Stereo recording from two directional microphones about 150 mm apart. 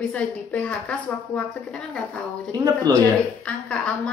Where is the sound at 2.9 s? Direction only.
25° right (ahead or behind).